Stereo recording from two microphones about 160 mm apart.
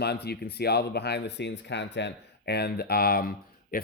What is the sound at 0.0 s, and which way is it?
Speech, 90° left.